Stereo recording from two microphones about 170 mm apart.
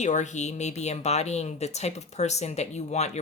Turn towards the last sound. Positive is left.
turn(degrees=40)  # may be behind; listen again after turning